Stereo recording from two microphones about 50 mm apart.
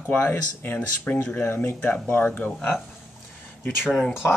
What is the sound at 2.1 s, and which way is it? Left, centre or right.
Speech, left.